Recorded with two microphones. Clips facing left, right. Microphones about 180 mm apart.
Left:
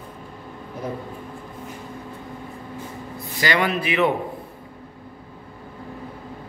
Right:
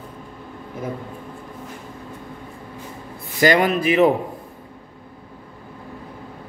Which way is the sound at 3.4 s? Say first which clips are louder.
Right 6 dB; 45° right (ahead or behind).